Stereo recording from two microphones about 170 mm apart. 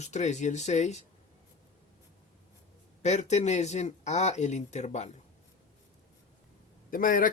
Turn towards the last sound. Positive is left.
turn(degrees=55)  # may be behind; listen again after turning